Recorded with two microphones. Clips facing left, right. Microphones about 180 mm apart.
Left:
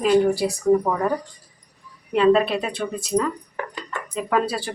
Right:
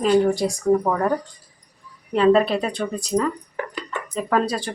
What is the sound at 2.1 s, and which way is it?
Speech, centre (ahead or behind).